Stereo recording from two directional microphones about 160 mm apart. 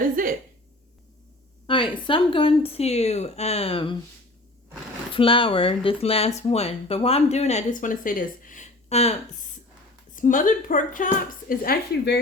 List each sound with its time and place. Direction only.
0.2 s a sound: 60° right (ahead or behind)
1.6 s speech: 30° left (ahead or behind)
5.1 s speech: 35° left (ahead or behind)
10.2 s speech: 55° left (ahead or behind); by 12.2 s 80° left